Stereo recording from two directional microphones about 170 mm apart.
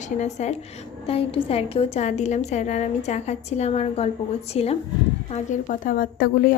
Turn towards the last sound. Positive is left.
turn(degrees=55)  # may be behind; listen again after turning